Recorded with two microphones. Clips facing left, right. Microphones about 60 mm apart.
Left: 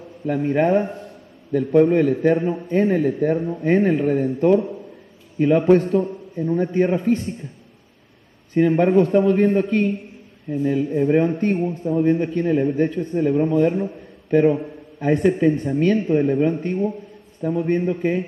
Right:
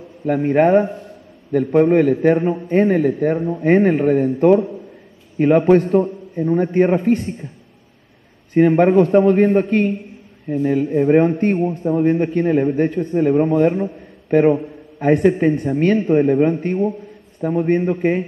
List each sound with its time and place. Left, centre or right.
0.2 s a man's voice: right
8.5 s a man's voice: right